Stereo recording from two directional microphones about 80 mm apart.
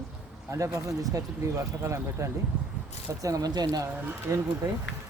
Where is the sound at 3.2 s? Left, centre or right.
Right.